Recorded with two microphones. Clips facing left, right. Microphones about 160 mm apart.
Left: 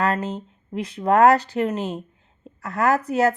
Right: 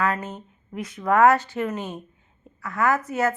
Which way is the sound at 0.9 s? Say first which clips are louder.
Left 2 dB; 35° left (ahead or behind).